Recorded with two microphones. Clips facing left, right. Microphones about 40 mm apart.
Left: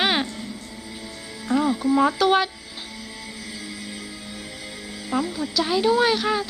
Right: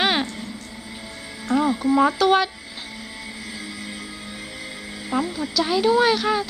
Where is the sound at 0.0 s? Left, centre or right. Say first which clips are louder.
Right 1 dB; centre.